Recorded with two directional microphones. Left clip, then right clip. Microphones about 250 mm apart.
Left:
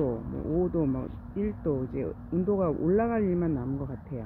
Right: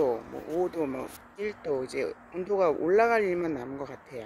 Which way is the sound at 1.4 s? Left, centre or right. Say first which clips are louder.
Even; right.